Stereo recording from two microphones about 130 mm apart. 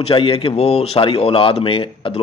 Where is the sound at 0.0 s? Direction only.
45° left (ahead or behind).